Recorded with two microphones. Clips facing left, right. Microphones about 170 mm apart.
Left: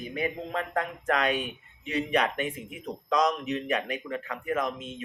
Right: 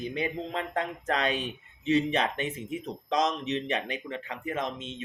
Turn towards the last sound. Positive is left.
turn(degrees=-25)  # may be behind; listen again after turning